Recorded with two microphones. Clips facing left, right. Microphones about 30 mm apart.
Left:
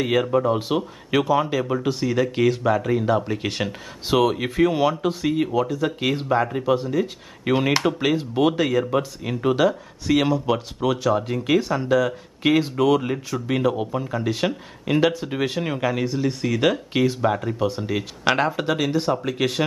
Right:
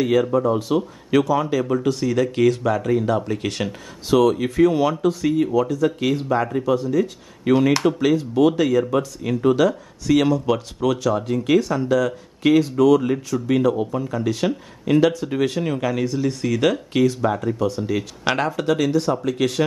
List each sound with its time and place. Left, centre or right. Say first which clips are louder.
0.0 s speech: right 2 dB; centre
18.2 s speech: left 2 dB; centre